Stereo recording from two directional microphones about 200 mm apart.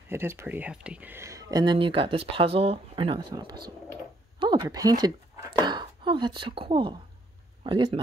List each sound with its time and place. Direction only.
0.1 s speech: 10° right (ahead or behind)